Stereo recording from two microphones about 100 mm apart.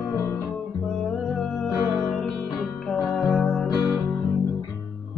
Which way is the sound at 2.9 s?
5° left (ahead or behind).